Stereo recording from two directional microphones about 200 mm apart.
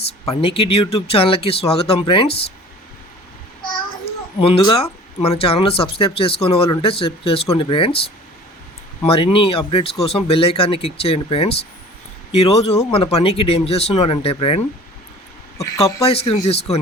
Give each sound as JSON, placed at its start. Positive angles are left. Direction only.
{"t": 0.3, "sound": "speech", "side_deg": 30}
{"t": 4.4, "sound": "speech", "side_deg": 30}
{"t": 9.0, "sound": "speech", "side_deg": 25}
{"t": 16.0, "sound": "speech", "side_deg": 30}